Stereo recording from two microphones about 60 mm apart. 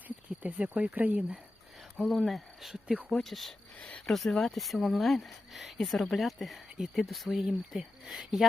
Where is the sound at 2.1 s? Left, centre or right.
Centre.